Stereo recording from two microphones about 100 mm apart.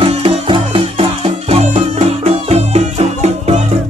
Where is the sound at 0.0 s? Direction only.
60° right (ahead or behind).